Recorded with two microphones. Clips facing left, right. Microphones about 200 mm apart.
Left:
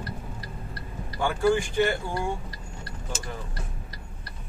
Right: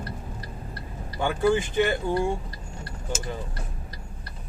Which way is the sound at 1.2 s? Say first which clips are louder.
Right 1 dB; 20° right (ahead or behind).